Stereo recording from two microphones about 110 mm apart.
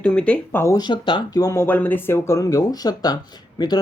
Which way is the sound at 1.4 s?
30° left (ahead or behind).